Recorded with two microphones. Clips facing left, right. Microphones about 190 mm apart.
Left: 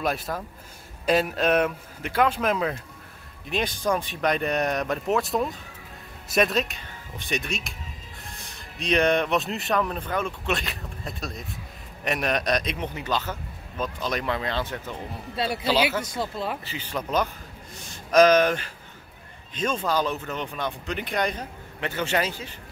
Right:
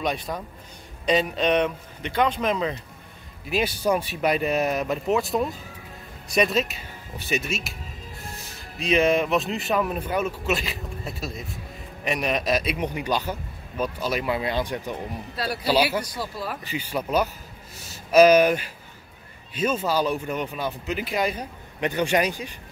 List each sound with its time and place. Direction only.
0.0 s speech: 5° left (ahead or behind)
3.4 s a man's voice: 5° right (ahead or behind)
15.3 s speech: 25° left (ahead or behind)
15.6 s a man's voice: 10° right (ahead or behind)
16.0 s speech: 25° left (ahead or behind)
16.6 s a man's voice: 10° right (ahead or behind)
21.7 s a man's voice: 15° right (ahead or behind)